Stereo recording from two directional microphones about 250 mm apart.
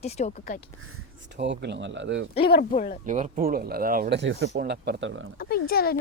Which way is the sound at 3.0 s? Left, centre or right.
Right.